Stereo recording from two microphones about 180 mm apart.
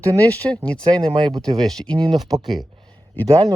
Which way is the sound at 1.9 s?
20° right (ahead or behind).